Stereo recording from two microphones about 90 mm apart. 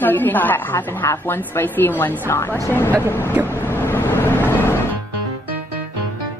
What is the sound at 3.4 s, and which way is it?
Music, 25° left (ahead or behind).